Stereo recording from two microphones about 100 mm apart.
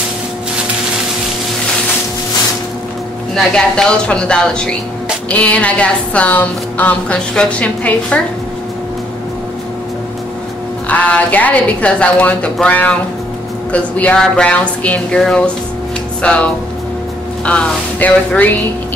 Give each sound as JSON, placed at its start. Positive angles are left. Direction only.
{"t": 3.3, "sound": "a woman's voice", "side_deg": 10}
{"t": 10.9, "sound": "a woman's voice", "side_deg": 15}
{"t": 17.5, "sound": "a woman's voice", "side_deg": 15}